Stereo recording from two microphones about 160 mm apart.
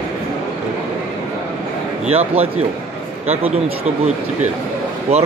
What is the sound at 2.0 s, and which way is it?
Speech, 40° right (ahead or behind).